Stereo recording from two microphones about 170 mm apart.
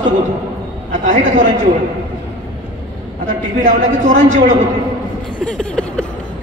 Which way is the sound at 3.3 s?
45° right (ahead or behind).